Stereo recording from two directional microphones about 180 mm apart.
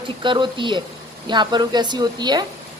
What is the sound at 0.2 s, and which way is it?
A woman's voice, 25° right (ahead or behind).